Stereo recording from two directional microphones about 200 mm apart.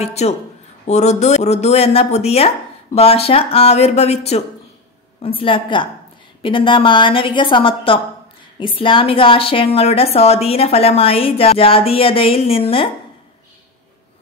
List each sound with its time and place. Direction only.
0.0 s a woman's voice: 30° left (ahead or behind)